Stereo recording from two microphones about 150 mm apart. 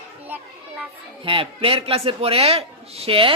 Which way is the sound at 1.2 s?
35° right (ahead or behind).